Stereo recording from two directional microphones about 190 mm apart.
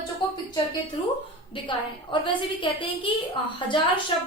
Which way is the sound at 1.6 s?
25° left (ahead or behind).